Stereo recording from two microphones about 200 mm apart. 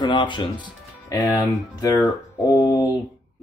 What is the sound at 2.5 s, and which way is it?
Mantra, 15° left (ahead or behind).